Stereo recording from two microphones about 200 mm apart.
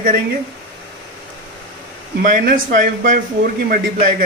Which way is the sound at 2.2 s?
45° right (ahead or behind).